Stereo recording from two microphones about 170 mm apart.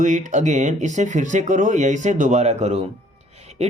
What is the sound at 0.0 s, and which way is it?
Speech, 45° right (ahead or behind).